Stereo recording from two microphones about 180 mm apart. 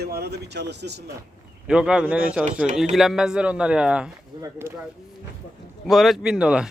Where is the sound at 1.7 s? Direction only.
5° right (ahead or behind).